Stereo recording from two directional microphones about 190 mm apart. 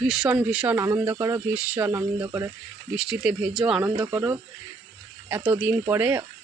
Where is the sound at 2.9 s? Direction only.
5° right (ahead or behind).